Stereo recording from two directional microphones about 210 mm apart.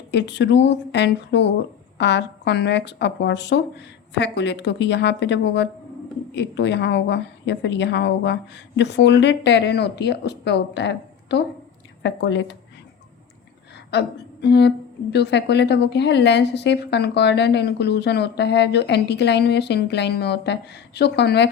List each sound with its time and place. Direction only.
0.1 s a woman's voice: 55° left (ahead or behind)
13.9 s a woman's voice: 55° left (ahead or behind)